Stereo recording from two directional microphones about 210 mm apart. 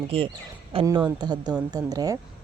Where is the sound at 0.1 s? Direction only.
25° right (ahead or behind).